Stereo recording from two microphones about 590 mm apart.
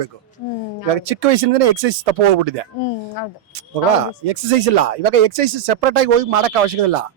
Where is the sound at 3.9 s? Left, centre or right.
Right.